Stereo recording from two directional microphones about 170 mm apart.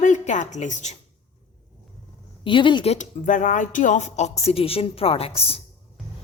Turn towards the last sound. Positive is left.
turn(degrees=35)  # may be behind; listen again after turning